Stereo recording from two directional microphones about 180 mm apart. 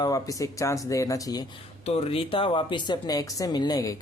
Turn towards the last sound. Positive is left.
turn(degrees=20)  # may be behind; listen again after turning